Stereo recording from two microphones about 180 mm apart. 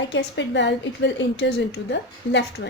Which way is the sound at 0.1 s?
80° left.